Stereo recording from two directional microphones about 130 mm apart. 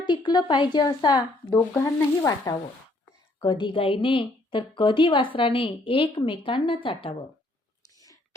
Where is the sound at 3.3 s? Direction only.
35° left (ahead or behind).